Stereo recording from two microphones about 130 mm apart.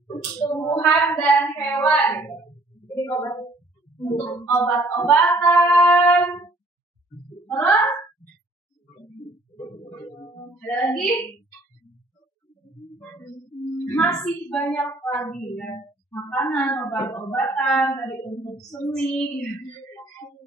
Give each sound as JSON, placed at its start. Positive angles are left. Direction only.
{"t": 0.2, "sound": "a sound", "side_deg": 20}
{"t": 0.7, "sound": "speech", "side_deg": 15}
{"t": 2.9, "sound": "a sound", "side_deg": 20}
{"t": 4.6, "sound": "speech", "side_deg": 15}
{"t": 7.4, "sound": "a sound", "side_deg": 15}
{"t": 9.8, "sound": "music", "side_deg": 20}
{"t": 10.9, "sound": "speech", "side_deg": 10}
{"t": 13.7, "sound": "music", "side_deg": 15}
{"t": 14.0, "sound": "a woman's voice", "side_deg": 5}
{"t": 18.4, "sound": "speech", "side_deg": 30}
{"t": 19.0, "sound": "speech", "side_deg": 10}